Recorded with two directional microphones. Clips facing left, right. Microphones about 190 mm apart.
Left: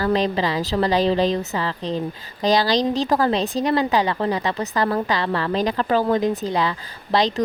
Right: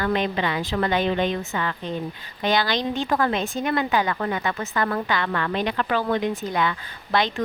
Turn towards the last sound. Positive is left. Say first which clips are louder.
# left 3 dB
turn(degrees=30)  # may be behind; listen again after turning